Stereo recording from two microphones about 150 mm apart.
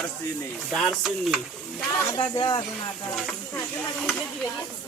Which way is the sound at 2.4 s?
35° left (ahead or behind).